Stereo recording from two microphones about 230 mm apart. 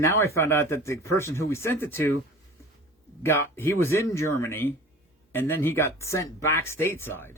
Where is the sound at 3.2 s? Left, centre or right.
Centre.